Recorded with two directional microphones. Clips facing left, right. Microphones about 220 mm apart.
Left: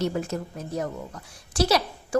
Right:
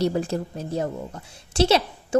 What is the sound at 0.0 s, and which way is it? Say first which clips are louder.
A woman's voice: right 4 dB; 30° right (ahead or behind).